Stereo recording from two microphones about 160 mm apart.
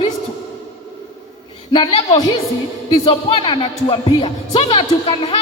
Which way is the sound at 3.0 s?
35° left (ahead or behind).